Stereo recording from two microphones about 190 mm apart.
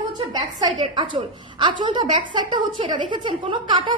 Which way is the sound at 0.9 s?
25° right (ahead or behind).